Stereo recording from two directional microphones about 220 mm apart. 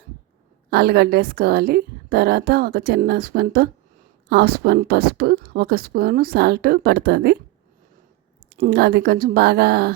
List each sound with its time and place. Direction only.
0.7 s a woman's voice: 45° right (ahead or behind)
8.4 s a woman's voice: 45° right (ahead or behind)